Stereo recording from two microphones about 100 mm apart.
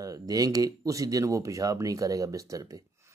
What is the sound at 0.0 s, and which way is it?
Speech, 35° right (ahead or behind).